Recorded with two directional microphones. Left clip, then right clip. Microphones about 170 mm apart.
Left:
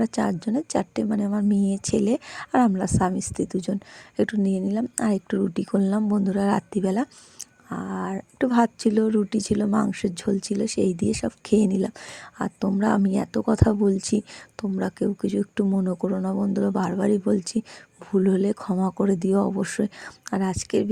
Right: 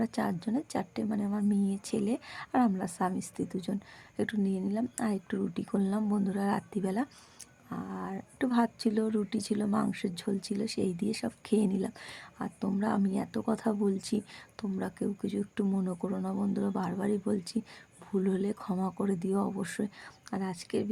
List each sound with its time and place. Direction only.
0.0 s speech: 35° left (ahead or behind)